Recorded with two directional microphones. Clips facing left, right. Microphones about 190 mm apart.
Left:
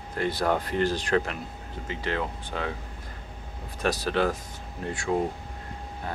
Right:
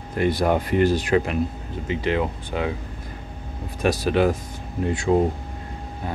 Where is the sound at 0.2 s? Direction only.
15° right (ahead or behind).